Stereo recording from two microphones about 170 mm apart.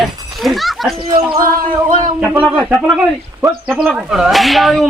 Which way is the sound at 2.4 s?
Centre (ahead or behind).